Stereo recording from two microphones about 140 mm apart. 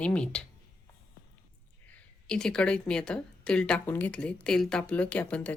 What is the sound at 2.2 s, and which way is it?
Speech, 5° left (ahead or behind).